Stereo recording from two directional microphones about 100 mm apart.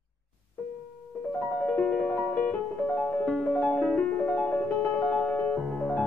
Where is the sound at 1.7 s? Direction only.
15° left (ahead or behind).